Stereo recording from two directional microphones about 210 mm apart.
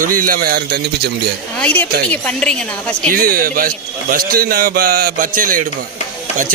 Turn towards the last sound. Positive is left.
turn(degrees=-40)  # may be behind; listen again after turning